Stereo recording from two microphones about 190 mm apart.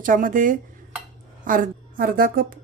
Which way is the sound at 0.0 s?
45° right (ahead or behind).